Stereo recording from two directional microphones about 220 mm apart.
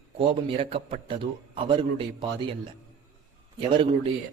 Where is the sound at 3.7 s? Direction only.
20° right (ahead or behind).